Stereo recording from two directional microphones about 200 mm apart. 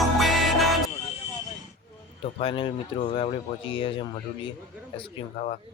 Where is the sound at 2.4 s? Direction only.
25° left (ahead or behind).